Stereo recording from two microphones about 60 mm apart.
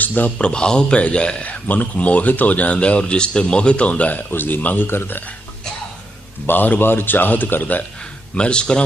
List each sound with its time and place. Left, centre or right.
0.0 s a man's voice: left
0.3 s speech: centre
1.5 s a man's voice: left
6.5 s speech: left
8.4 s speech: centre